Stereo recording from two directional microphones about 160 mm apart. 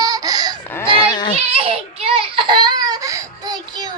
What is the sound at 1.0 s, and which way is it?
Children playing, 25° left (ahead or behind).